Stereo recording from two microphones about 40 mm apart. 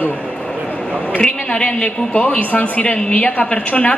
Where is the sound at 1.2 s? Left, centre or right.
Left.